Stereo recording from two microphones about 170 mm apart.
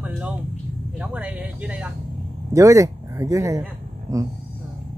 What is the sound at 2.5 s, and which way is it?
Speech, 20° right (ahead or behind).